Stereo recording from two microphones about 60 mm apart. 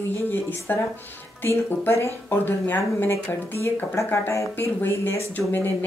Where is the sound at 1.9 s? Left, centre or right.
Left.